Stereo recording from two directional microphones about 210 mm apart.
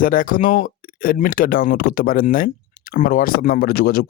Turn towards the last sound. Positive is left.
turn(degrees=45)  # may be behind; listen again after turning